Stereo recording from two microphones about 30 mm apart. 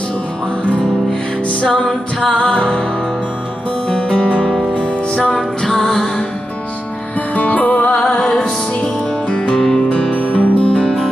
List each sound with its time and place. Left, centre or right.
1.7 s music: centre
2.3 s music: left
3.9 s music: left
5.1 s music: left
7.3 s music: left
8.0 s music: left
9.6 s music: left
10.1 s music: left
10.7 s music: left